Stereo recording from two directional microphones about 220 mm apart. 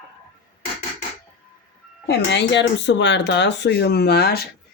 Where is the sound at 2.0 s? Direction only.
50° left (ahead or behind).